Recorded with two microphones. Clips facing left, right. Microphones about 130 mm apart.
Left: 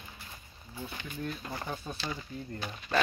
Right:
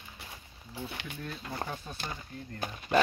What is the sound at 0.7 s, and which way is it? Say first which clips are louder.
Speech: right 1 dB; 70° right (ahead or behind).